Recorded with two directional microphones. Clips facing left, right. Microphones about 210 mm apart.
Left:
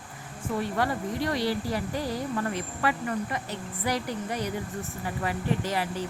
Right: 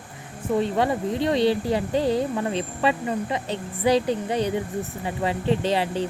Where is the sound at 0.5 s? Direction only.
20° right (ahead or behind).